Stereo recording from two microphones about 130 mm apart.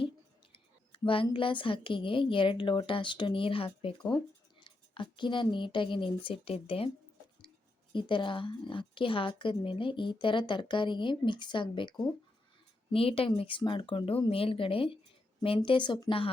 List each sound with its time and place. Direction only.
0.5 s a woman's voice: 40° left (ahead or behind)
7.9 s a woman's voice: 40° left (ahead or behind)